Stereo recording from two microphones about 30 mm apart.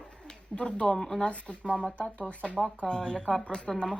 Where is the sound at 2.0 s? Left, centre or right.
Left.